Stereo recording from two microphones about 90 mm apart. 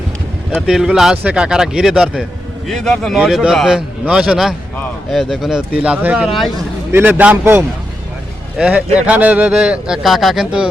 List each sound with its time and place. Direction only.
0.7 s speech: 5° right (ahead or behind)
3.2 s speech: 5° right (ahead or behind)
6.2 s speech: centre (ahead or behind)
6.9 s a man's voice: 20° right (ahead or behind)